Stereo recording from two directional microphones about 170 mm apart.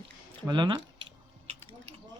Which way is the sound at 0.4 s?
25° right (ahead or behind).